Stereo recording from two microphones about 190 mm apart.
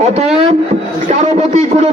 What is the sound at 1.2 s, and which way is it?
Speech, 40° right (ahead or behind).